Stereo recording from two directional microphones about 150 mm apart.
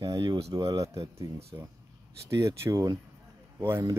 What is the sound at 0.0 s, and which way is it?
Speech, 30° right (ahead or behind).